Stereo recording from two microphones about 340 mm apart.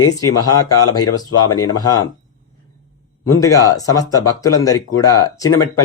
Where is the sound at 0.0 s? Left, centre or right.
Left.